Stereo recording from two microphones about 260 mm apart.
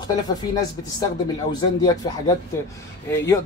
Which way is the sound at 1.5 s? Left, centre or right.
Centre.